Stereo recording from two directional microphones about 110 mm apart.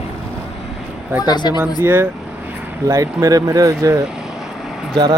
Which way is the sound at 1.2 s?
40° left (ahead or behind).